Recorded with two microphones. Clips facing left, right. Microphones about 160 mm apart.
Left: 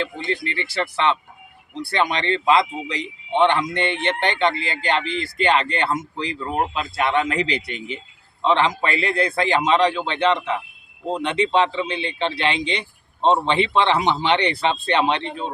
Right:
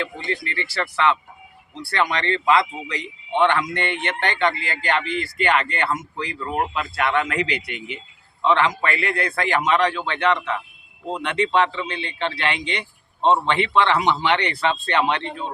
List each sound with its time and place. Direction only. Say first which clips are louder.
0.0 s speech: left 2 dB; 25° left (ahead or behind)